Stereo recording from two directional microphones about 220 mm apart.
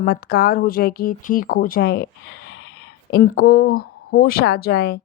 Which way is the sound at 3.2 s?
40° left (ahead or behind).